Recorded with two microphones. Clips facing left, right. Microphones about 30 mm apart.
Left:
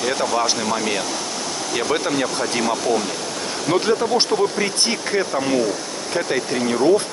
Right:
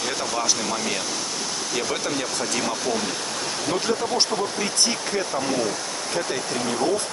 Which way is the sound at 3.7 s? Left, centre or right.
Left.